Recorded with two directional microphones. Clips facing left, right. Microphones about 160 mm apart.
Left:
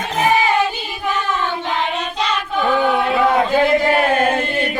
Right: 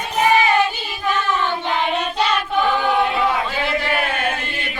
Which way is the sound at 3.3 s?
45° left (ahead or behind).